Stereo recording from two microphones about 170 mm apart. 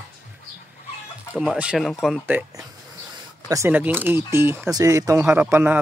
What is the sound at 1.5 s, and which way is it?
Speech, 5° right (ahead or behind).